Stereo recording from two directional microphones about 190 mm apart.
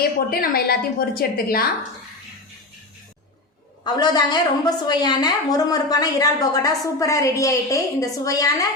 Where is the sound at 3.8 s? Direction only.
20° left (ahead or behind).